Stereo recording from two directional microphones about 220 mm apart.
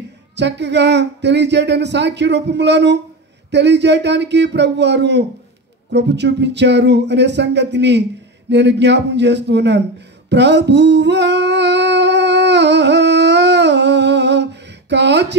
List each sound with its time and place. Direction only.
0.4 s speech: 50° right (ahead or behind)
10.3 s music: 50° right (ahead or behind)